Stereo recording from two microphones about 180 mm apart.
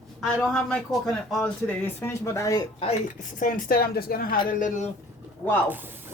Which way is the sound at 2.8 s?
40° left (ahead or behind).